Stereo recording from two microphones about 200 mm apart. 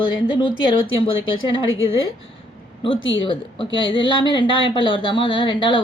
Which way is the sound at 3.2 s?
25° left (ahead or behind).